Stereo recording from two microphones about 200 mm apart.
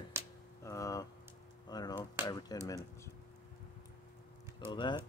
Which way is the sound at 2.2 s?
20° left (ahead or behind).